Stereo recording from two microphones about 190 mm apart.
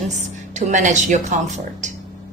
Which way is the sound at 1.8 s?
40° right (ahead or behind).